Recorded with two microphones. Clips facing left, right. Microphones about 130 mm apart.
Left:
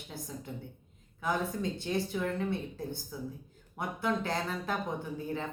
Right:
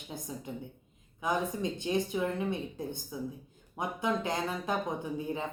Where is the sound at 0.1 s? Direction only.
15° right (ahead or behind).